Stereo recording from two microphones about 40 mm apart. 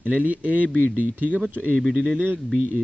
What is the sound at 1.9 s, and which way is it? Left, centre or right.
Speech, right.